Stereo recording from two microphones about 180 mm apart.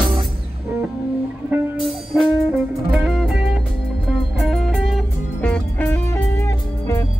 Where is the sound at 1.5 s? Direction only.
Centre (ahead or behind).